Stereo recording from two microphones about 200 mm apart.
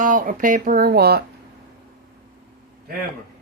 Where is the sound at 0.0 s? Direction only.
40° right (ahead or behind).